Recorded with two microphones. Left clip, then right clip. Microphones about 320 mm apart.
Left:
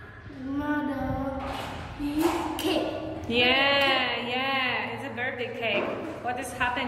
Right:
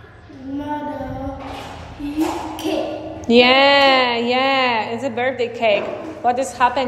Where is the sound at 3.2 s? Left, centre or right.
Centre.